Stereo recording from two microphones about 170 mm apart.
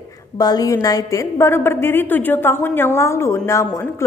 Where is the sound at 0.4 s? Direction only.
20° left (ahead or behind).